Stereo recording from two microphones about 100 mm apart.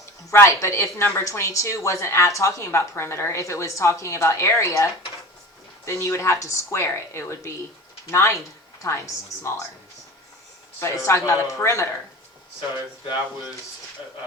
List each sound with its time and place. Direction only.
0.0 s speech: 30° left (ahead or behind)
10.8 s speech: 30° left (ahead or behind)